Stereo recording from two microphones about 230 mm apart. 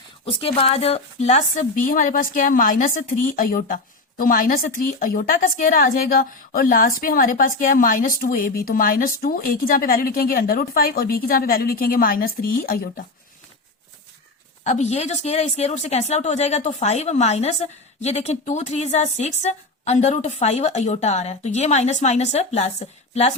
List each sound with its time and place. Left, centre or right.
0.3 s a woman's voice: left
14.6 s speech: left